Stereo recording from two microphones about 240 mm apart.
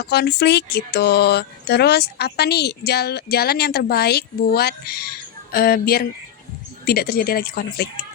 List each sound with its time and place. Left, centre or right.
0.0 s speech: left